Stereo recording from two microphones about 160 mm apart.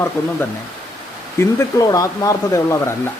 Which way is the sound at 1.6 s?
20° left (ahead or behind).